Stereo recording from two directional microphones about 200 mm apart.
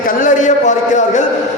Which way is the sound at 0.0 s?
40° left (ahead or behind).